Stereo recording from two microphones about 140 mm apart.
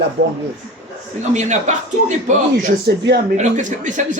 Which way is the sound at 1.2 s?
55° right (ahead or behind).